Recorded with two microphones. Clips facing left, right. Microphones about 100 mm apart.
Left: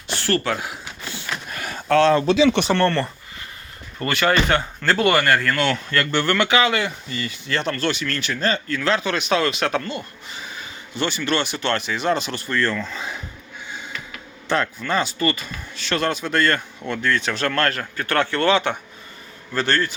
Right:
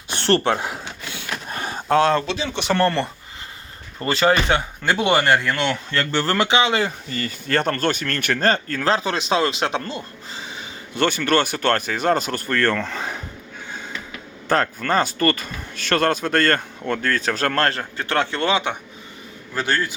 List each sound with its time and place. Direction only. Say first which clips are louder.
0.2 s speech: right 4 dB; 30° right (ahead or behind)
1.5 s a sound: right 3 dB; 35° right (ahead or behind)
1.7 s a sound: left 1 dB; 20° right (ahead or behind)
2.3 s speech: left 9 dB; 45° left (ahead or behind)
2.7 s speech: even; 5° right (ahead or behind)
4.0 s speech: right 1 dB; 25° right (ahead or behind)
6.1 s speech: even; 30° right (ahead or behind)
10.9 s speech: right 4 dB; 55° right (ahead or behind)
14.4 s speech: right 2 dB; 45° right (ahead or behind); by 20.0 s 15° right (ahead or behind)